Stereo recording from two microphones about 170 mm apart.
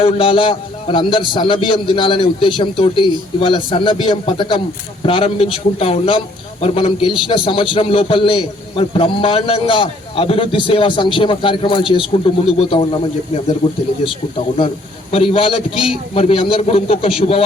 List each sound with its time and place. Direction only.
0.0 s a man's voice: 30° left (ahead or behind)
14.0 s a man's voice: 30° left (ahead or behind)